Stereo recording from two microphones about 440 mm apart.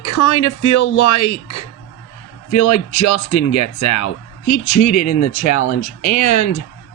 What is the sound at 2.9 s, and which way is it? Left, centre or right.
Speech, centre.